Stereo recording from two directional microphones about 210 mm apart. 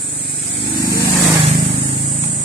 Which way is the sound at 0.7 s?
15° left (ahead or behind).